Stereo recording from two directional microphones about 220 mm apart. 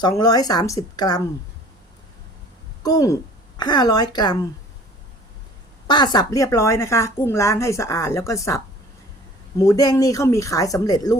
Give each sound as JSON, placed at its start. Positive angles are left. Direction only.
{"t": 0.0, "sound": "a woman's voice", "side_deg": 15}
{"t": 2.8, "sound": "a woman's voice", "side_deg": 15}
{"t": 5.9, "sound": "a woman's voice", "side_deg": 20}